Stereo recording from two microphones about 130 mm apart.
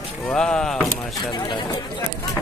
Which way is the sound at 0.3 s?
5° left (ahead or behind).